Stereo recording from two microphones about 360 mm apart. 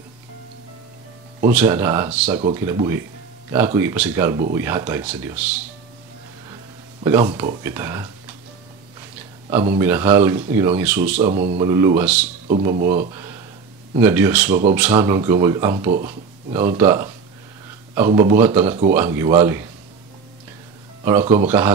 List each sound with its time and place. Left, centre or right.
1.5 s speech: centre
7.3 s speech: centre
9.5 s speech: centre
11.2 s speech: right
11.6 s speech: centre
12.4 s speech: centre
21.0 s speech: centre